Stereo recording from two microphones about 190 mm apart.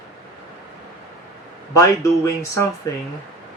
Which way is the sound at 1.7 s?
15° left (ahead or behind).